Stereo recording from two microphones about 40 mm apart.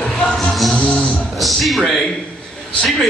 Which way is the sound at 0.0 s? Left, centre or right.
Left.